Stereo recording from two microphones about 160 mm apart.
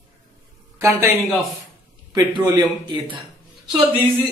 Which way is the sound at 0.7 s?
20° right (ahead or behind).